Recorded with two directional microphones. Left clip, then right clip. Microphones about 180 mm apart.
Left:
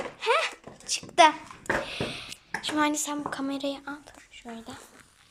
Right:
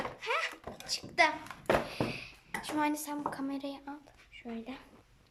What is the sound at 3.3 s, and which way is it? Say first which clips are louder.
Speech: left 6 dB; centre (ahead or behind).